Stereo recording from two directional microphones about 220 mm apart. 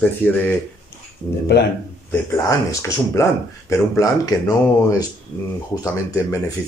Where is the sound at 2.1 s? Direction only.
15° left (ahead or behind).